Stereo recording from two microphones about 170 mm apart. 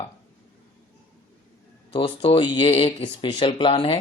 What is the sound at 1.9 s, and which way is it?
Speech, 30° left (ahead or behind).